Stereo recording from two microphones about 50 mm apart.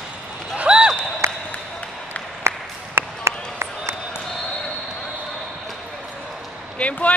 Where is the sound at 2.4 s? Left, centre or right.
Right.